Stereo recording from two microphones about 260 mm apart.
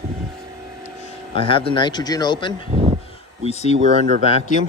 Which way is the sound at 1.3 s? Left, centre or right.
Left.